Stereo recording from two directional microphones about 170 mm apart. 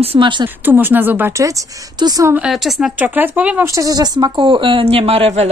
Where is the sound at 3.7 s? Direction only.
20° right (ahead or behind); by 5.4 s 35° right (ahead or behind).